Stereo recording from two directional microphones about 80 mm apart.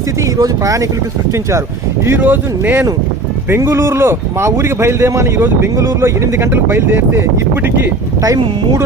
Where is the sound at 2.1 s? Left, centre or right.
Right.